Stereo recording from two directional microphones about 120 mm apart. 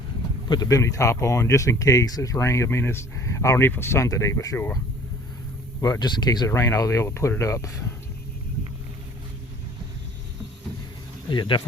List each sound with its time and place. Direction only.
0.4 s speech: 35° left (ahead or behind)
5.8 s speech: 35° left (ahead or behind)
11.3 s speech: 40° left (ahead or behind)